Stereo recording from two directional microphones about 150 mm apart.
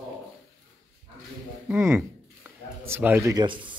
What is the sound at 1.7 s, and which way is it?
Speech, 15° right (ahead or behind).